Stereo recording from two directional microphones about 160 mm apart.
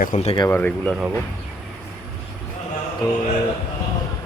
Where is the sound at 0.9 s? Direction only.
5° right (ahead or behind).